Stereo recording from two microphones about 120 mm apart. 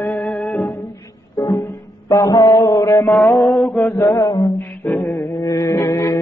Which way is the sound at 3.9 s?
25° left (ahead or behind).